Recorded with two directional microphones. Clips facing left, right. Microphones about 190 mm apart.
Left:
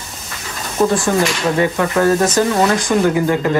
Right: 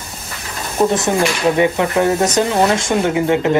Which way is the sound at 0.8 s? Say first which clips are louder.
Even; 20° right (ahead or behind).